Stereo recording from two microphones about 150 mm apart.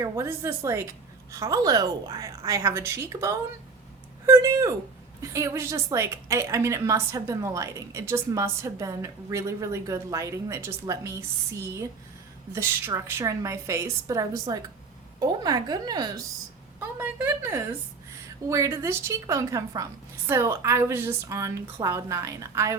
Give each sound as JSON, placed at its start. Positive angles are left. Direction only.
{"t": 0.0, "sound": "a woman's voice", "side_deg": -20}